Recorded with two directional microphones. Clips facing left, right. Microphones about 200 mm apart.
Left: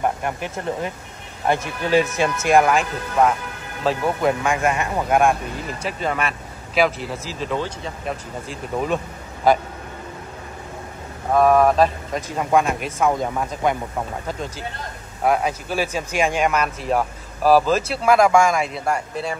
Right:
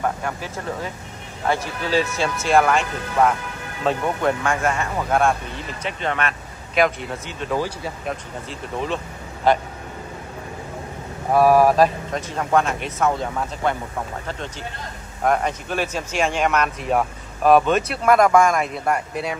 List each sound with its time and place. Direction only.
0.0 s speech: 20° left (ahead or behind)
1.5 s speech: 15° left (ahead or behind); by 8.2 s 5° right (ahead or behind)
8.8 s speech: 10° left (ahead or behind)
11.3 s speech: 5° right (ahead or behind)
12.3 s speech: 10° left (ahead or behind)
15.2 s speech: 5° left (ahead or behind)